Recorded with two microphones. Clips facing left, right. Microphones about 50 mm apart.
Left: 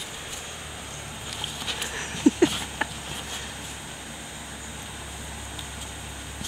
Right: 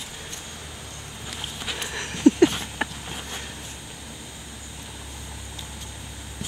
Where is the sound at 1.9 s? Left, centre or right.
Left.